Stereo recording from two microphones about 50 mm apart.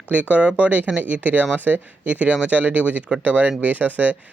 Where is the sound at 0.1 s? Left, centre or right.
Right.